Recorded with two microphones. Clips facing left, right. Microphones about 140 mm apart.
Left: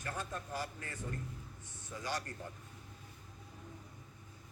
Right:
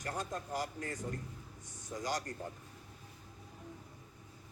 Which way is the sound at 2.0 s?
40° right (ahead or behind).